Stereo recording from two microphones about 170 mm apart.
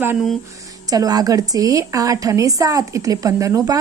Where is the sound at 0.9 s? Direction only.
20° right (ahead or behind).